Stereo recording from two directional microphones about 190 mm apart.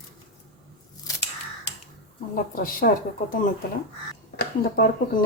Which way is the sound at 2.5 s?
50° left (ahead or behind).